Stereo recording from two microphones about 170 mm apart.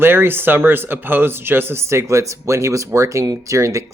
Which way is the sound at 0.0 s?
15° right (ahead or behind).